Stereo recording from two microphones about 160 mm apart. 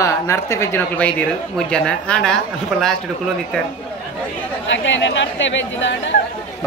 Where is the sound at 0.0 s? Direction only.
20° left (ahead or behind).